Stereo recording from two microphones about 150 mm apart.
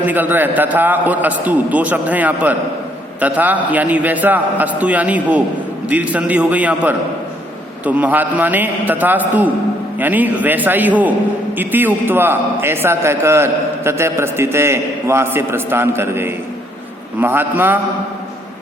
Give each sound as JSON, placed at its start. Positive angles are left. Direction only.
{"t": 0.0, "sound": "a man's voice", "side_deg": -10}